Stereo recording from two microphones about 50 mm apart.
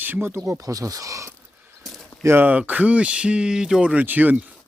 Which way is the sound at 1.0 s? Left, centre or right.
Right.